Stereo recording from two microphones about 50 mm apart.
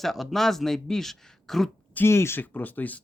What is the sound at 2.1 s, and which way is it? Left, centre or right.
Speech, left.